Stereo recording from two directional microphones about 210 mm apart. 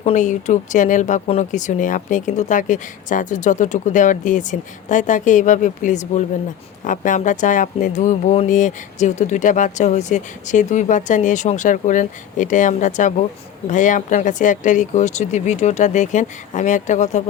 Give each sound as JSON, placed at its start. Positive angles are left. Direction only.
{"t": 0.0, "sound": "speech", "side_deg": 35}